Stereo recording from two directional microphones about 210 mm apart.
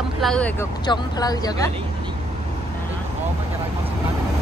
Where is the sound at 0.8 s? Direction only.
20° left (ahead or behind).